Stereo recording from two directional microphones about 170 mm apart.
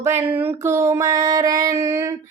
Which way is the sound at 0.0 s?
15° right (ahead or behind).